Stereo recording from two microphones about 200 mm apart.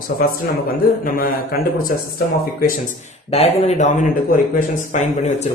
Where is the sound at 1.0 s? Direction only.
45° left (ahead or behind).